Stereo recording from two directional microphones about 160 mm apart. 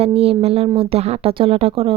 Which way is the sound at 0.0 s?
40° right (ahead or behind).